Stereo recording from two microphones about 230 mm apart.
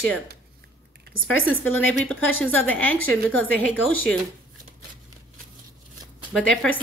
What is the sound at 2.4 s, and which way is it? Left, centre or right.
A woman's voice, centre.